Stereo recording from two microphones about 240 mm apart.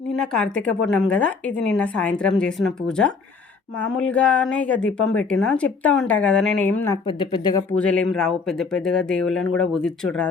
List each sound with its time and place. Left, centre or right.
0.2 s a woman's voice: centre
7.8 s a woman's voice: centre